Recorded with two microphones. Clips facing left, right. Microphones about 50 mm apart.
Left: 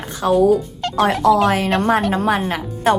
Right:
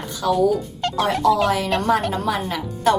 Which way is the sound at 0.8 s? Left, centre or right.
Centre.